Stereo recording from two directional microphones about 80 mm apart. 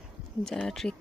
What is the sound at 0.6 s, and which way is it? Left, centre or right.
Speech, centre.